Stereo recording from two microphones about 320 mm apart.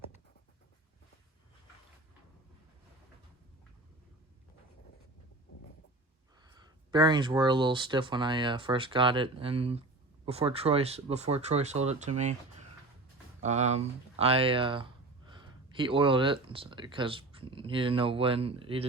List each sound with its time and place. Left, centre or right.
6.4 s speech: centre